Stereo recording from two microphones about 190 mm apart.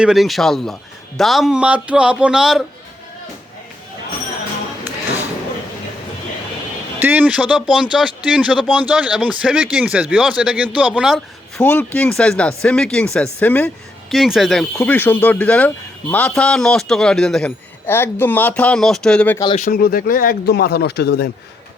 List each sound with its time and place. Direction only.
0.0 s speech: centre (ahead or behind)
7.0 s speech: 10° right (ahead or behind)
11.6 s speech: 10° left (ahead or behind)
19.5 s speech: 45° left (ahead or behind)